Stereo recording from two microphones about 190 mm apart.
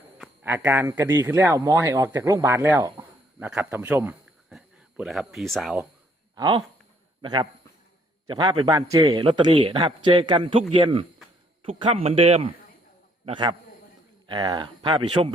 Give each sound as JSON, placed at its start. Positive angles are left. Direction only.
{"t": 0.4, "sound": "a man's voice", "side_deg": -10}
{"t": 6.3, "sound": "a man's voice", "side_deg": -20}